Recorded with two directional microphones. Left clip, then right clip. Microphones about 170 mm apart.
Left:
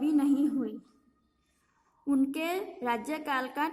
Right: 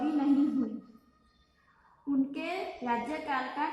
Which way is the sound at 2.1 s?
55° left (ahead or behind).